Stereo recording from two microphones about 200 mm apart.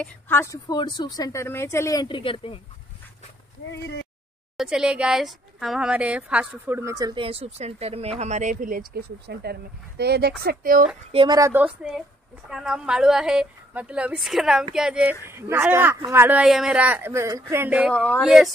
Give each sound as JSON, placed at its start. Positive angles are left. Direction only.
{"t": 0.0, "sound": "a woman's voice", "side_deg": 10}
{"t": 4.6, "sound": "speech", "side_deg": -5}
{"t": 11.1, "sound": "a woman's voice", "side_deg": -25}